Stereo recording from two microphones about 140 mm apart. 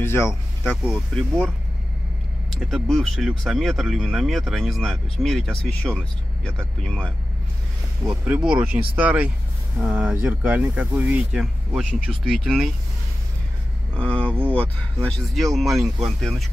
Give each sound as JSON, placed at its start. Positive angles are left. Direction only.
{"t": 0.0, "sound": "speech", "side_deg": 15}
{"t": 0.8, "sound": "speech", "side_deg": 5}
{"t": 2.5, "sound": "speech", "side_deg": 0}
{"t": 8.1, "sound": "speech", "side_deg": -10}
{"t": 13.9, "sound": "speech", "side_deg": 10}